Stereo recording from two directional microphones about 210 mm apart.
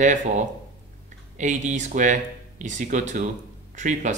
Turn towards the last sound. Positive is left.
turn(degrees=-35)  # may be behind; listen again after turning